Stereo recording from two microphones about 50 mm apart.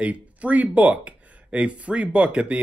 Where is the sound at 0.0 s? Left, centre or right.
Right.